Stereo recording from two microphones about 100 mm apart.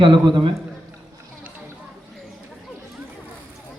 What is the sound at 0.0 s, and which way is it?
Speech, 50° right (ahead or behind).